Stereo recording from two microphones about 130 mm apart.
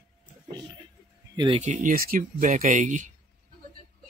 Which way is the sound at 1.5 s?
65° right (ahead or behind).